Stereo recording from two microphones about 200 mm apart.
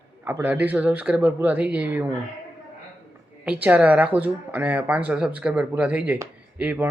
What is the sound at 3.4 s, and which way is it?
A woman's voice, 5° right (ahead or behind).